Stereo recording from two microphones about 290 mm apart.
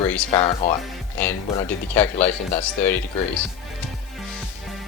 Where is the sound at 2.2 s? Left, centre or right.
Left.